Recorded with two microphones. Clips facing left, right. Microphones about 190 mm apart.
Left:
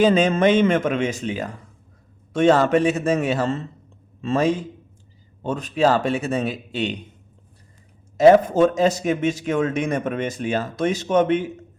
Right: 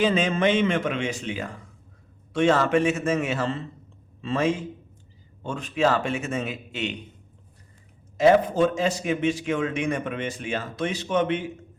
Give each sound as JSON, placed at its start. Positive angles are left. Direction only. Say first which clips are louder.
{"t": 0.0, "sound": "a man's voice", "louder": "left 5 dB", "side_deg": 40}
{"t": 8.2, "sound": "a man's voice", "louder": "left 5 dB", "side_deg": 45}